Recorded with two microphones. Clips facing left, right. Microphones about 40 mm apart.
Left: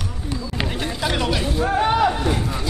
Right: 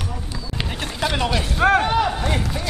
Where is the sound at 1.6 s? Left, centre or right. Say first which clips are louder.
Right 6 dB; right.